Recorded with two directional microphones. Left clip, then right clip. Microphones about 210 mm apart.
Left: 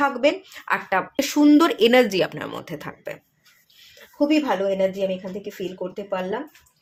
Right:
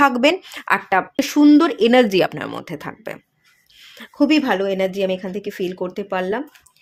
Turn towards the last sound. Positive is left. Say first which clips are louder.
# right 4 dB
turn(degrees=-45)  # may be behind; listen again after turning